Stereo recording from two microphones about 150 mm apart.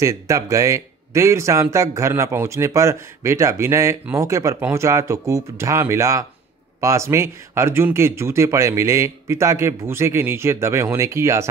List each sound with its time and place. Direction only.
0.0 s speech: 20° right (ahead or behind)